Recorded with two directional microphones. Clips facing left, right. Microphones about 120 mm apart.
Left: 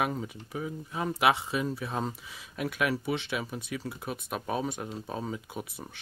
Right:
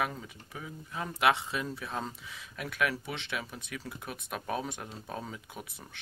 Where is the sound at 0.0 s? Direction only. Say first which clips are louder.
Left 4 dB; 25° left (ahead or behind).